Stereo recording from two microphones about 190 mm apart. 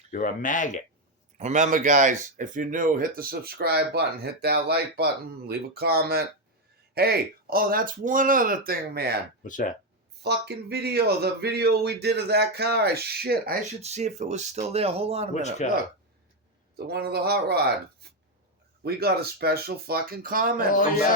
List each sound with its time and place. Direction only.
0.1 s speech: 45° left (ahead or behind)
1.4 s speech: 40° right (ahead or behind)
9.4 s speech: 45° left (ahead or behind)
10.2 s speech: 60° right (ahead or behind)
13.8 s speech: 35° right (ahead or behind)
15.3 s speech: 35° left (ahead or behind)
16.7 s speech: 55° right (ahead or behind)
18.8 s speech: 55° right (ahead or behind)